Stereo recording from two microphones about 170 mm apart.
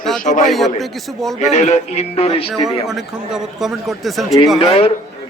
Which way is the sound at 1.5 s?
45° left (ahead or behind).